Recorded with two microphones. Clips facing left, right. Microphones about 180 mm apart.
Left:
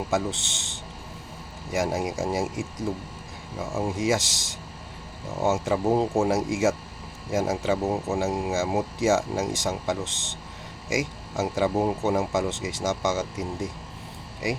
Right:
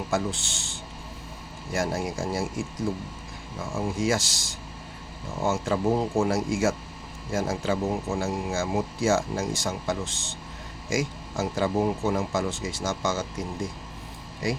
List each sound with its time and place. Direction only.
0.1 s speech: 20° left (ahead or behind)